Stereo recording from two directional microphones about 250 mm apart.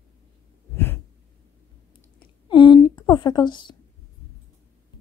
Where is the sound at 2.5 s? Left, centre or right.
Centre.